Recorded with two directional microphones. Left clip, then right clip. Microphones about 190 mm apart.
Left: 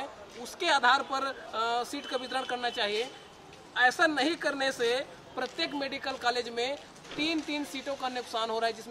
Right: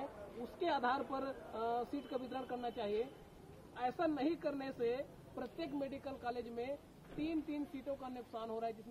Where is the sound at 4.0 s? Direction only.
5° right (ahead or behind).